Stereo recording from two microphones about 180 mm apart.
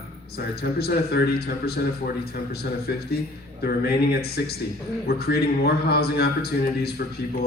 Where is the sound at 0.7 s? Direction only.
60° left (ahead or behind).